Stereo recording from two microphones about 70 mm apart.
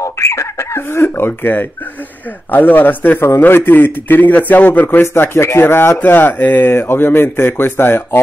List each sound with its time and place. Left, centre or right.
0.0 s telephone dialing: left
2.5 s a man's voice: left
4.8 s speech: left